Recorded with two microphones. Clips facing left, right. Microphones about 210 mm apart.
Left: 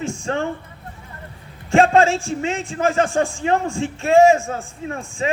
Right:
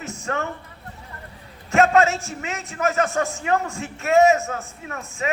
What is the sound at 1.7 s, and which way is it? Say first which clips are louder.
A man's voice: left 3 dB; 30° left (ahead or behind).